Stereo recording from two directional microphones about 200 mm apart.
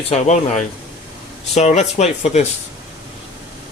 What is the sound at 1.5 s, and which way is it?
Speech, 35° left (ahead or behind).